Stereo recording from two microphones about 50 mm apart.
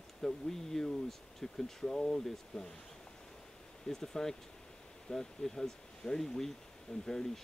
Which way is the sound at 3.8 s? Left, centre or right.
Centre.